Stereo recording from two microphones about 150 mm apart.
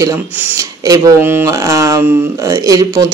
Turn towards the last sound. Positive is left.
turn(degrees=-25)  # may be behind; listen again after turning